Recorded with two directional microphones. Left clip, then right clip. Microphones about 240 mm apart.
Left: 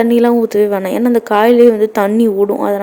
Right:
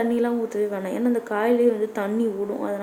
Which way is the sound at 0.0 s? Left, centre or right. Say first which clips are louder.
Left 12 dB; left.